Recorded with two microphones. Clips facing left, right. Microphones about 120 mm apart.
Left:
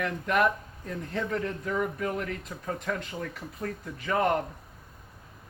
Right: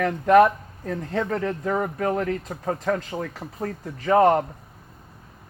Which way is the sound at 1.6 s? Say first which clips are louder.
Right 5 dB; 50° right (ahead or behind).